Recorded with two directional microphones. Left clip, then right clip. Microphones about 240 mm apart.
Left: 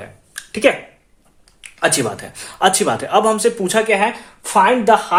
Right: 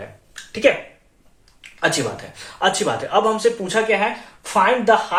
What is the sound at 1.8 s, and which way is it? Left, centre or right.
Speech, left.